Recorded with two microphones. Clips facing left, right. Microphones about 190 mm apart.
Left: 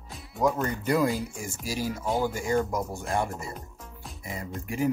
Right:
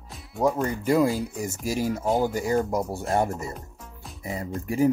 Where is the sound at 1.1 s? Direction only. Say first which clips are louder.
Right 3 dB; centre (ahead or behind).